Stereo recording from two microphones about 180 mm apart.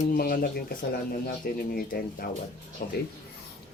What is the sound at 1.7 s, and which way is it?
Speech, 60° left (ahead or behind).